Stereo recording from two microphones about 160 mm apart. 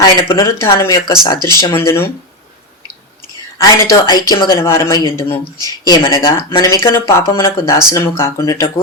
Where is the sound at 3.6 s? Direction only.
20° left (ahead or behind).